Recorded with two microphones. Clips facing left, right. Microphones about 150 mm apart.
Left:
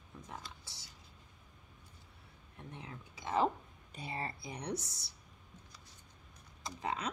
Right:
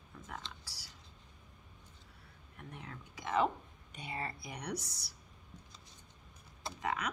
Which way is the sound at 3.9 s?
30° left (ahead or behind).